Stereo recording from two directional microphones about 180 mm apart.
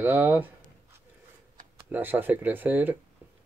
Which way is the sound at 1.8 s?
10° right (ahead or behind).